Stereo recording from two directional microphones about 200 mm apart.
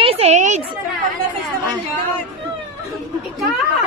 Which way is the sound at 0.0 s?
30° right (ahead or behind).